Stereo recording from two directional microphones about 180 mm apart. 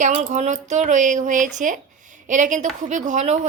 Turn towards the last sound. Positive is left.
turn(degrees=-40)  # may be behind; listen again after turning